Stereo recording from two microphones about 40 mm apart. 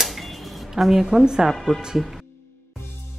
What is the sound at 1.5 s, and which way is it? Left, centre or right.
Speech, centre.